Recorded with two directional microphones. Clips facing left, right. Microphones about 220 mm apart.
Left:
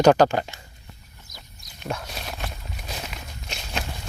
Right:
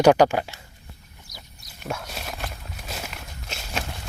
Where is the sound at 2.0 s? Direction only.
Centre (ahead or behind).